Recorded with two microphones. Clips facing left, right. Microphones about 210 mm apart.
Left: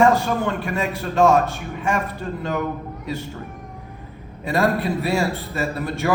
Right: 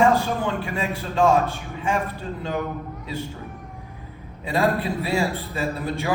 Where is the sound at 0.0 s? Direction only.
70° left (ahead or behind).